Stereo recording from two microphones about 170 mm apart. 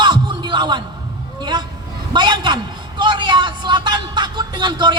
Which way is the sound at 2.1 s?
25° right (ahead or behind).